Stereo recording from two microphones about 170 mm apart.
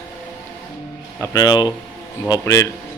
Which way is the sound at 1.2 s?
20° left (ahead or behind).